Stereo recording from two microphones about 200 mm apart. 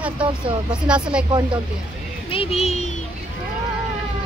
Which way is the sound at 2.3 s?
30° left (ahead or behind).